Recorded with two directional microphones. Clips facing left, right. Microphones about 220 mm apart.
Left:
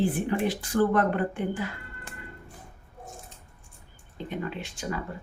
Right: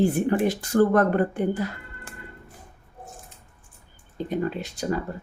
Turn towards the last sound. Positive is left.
turn(degrees=-40)  # may be behind; listen again after turning